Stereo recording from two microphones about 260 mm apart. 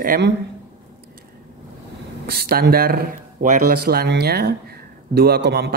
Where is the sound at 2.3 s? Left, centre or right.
Right.